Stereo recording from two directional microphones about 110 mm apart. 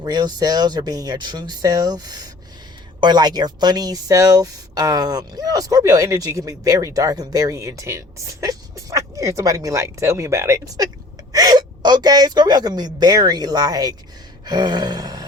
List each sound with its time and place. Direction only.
0.0 s speech: 40° right (ahead or behind)